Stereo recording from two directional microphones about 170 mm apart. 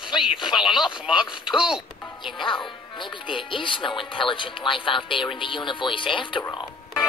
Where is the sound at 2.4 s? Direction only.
30° left (ahead or behind).